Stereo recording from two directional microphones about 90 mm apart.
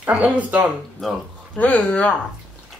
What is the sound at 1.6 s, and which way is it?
Speech, 15° left (ahead or behind).